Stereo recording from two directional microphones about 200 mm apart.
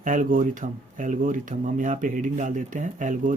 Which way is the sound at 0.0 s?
40° right (ahead or behind).